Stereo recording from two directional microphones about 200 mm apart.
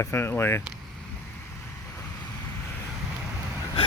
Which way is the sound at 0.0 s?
10° left (ahead or behind).